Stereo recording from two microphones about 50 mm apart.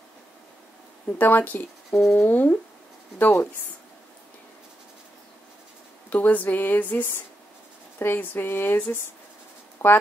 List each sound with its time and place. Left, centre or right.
1.1 s speech: left
1.9 s speech: centre
2.2 s speech: left
6.0 s speech: left